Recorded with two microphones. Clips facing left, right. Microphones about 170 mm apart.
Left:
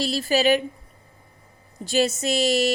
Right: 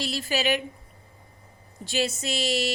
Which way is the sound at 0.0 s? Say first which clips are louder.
Left 6 dB; 35° left (ahead or behind).